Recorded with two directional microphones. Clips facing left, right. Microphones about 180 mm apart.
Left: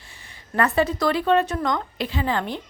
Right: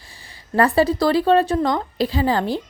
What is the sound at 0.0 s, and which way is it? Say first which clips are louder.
Speech: right 2 dB; 35° right (ahead or behind).